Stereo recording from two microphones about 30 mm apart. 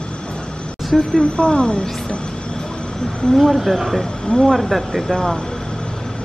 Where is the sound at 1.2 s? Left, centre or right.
Left.